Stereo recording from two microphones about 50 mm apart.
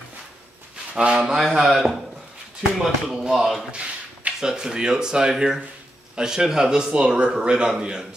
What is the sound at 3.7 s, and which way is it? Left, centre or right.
Speech, centre.